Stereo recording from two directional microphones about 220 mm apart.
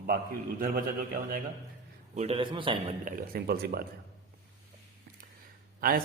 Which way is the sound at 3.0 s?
45° right (ahead or behind).